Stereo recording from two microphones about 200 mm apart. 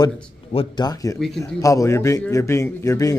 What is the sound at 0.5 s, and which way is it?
A man's voice, 20° left (ahead or behind).